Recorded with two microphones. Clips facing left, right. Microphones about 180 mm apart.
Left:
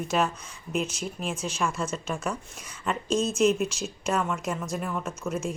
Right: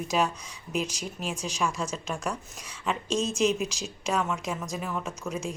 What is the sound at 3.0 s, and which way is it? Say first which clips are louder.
Speech: left 3 dB; 35° right (ahead or behind).